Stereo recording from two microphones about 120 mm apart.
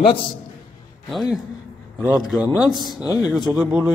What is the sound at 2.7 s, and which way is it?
Speech, 35° left (ahead or behind).